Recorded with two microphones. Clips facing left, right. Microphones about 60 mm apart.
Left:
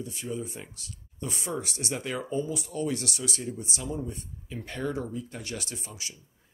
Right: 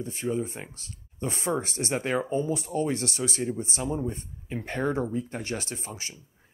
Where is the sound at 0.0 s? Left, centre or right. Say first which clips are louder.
Right 5 dB; right.